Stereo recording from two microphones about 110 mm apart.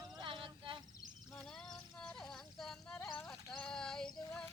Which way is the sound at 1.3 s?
Centre (ahead or behind).